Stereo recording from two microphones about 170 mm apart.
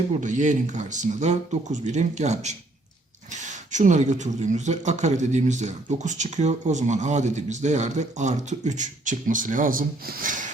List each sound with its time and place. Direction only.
0.2 s speech: 45° right (ahead or behind)